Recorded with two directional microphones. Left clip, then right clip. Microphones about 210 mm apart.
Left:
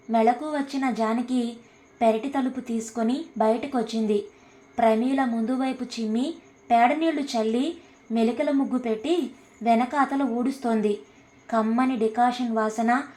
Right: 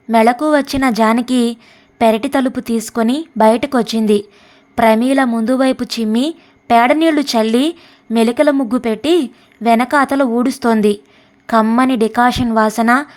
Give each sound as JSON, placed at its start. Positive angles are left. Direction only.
{"t": 0.1, "sound": "a woman's voice", "side_deg": -45}